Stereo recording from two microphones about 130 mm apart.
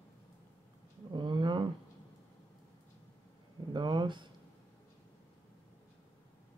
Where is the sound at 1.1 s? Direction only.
35° right (ahead or behind).